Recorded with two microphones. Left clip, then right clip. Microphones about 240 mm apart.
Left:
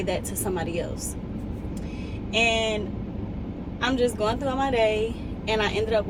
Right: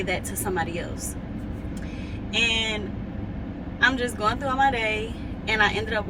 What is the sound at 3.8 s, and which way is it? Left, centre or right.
Speech, centre.